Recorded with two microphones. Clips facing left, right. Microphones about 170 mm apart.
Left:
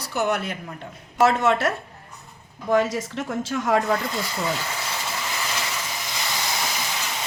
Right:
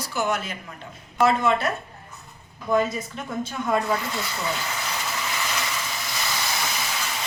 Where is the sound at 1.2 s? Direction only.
80° left.